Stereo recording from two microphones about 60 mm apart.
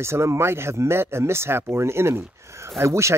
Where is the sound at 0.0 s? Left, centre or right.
Right.